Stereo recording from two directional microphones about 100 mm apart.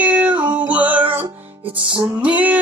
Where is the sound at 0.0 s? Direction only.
15° right (ahead or behind).